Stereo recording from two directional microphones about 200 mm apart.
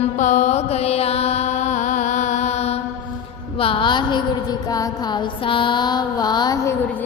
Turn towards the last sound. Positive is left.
turn(degrees=15)  # may be behind; listen again after turning